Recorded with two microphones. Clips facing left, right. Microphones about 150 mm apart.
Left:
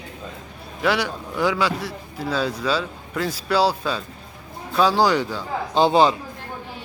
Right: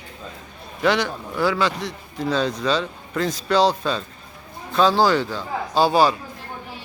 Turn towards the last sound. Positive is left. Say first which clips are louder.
# left 1 dB
turn(degrees=20)  # may be behind; listen again after turning